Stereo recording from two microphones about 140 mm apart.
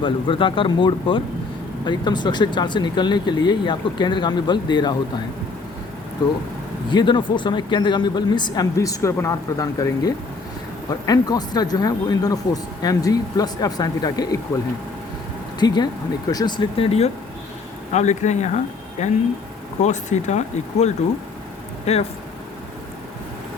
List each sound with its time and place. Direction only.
0.0 s speech: 40° left (ahead or behind)
6.9 s speech: 35° left (ahead or behind)
17.9 s speech: 55° left (ahead or behind)